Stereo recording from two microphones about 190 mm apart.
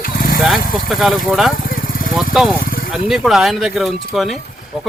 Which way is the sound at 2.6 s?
50° left (ahead or behind).